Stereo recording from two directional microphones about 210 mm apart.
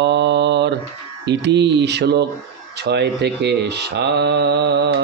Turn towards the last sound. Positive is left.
turn(degrees=-55)  # may be behind; listen again after turning